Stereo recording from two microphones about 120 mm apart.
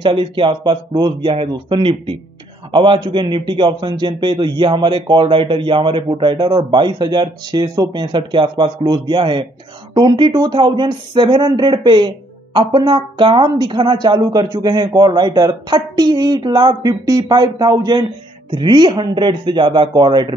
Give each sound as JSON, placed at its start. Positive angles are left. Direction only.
{"t": 0.0, "sound": "a man's voice", "side_deg": -45}